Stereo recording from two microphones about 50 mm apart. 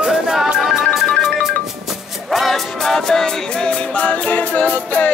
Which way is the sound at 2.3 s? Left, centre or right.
Centre.